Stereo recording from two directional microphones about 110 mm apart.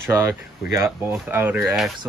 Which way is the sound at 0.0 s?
25° right (ahead or behind).